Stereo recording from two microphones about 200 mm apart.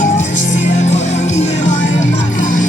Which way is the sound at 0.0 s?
40° left (ahead or behind).